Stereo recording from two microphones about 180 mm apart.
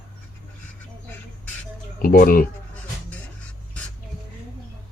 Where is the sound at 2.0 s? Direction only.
50° left (ahead or behind).